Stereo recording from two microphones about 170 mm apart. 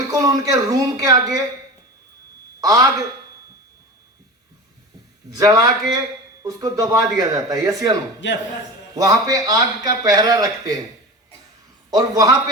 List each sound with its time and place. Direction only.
0.1 s a man's voice: 20° right (ahead or behind)
2.6 s a man's voice: 20° right (ahead or behind)
5.3 s a man's voice: 20° right (ahead or behind)
8.2 s speech: 90° left
9.0 s a man's voice: 20° right (ahead or behind)
11.9 s a man's voice: 20° right (ahead or behind)